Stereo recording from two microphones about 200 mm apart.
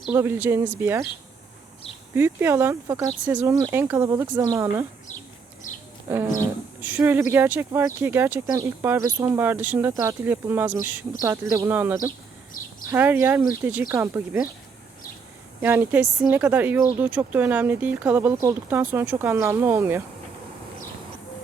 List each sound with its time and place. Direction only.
0.1 s speech: 10° right (ahead or behind)
2.1 s speech: 10° right (ahead or behind)
5.7 s a sound: 40° left (ahead or behind)
6.1 s speech: 10° right (ahead or behind)
15.6 s speech: 10° right (ahead or behind)